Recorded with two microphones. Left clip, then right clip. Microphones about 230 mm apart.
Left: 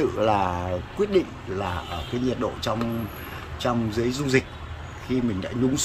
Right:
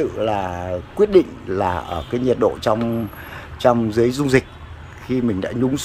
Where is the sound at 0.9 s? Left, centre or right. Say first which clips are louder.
Right 9 dB; centre.